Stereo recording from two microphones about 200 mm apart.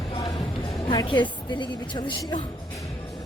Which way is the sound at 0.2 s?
20° left (ahead or behind).